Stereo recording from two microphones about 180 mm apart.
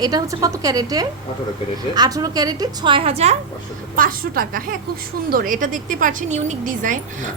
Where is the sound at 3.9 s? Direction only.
50° right (ahead or behind).